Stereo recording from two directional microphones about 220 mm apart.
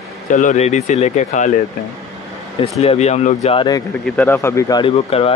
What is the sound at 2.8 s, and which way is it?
Speech, 30° left (ahead or behind).